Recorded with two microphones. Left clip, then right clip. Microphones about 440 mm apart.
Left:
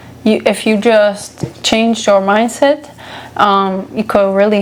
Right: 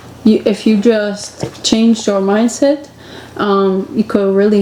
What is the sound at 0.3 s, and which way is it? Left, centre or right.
A woman's voice, left.